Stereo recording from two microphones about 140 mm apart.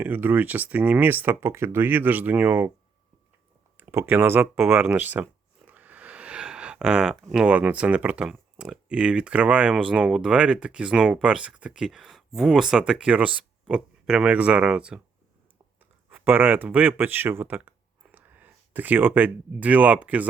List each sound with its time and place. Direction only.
0.0 s speech: 15° right (ahead or behind)
3.8 s speech: 15° right (ahead or behind)